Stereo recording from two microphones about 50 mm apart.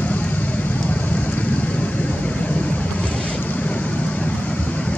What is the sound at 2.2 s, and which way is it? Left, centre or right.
Vehicle, left.